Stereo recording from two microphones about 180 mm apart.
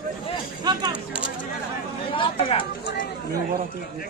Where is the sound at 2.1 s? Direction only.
30° left (ahead or behind).